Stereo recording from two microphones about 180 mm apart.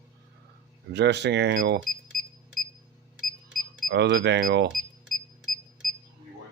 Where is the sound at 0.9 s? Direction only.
70° right (ahead or behind).